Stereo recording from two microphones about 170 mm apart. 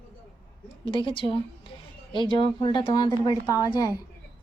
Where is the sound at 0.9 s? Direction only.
30° left (ahead or behind).